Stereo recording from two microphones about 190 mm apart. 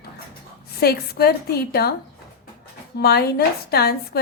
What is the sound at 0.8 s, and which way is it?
A woman's voice, 55° left (ahead or behind).